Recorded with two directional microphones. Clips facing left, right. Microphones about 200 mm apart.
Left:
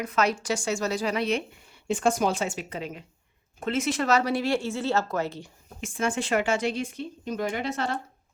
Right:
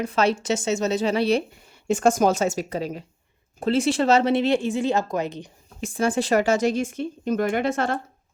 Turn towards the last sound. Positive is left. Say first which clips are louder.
# right 6 dB
turn(degrees=-50)  # may be behind; listen again after turning